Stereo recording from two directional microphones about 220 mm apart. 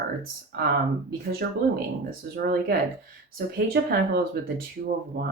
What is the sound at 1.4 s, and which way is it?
Speech, 50° right (ahead or behind).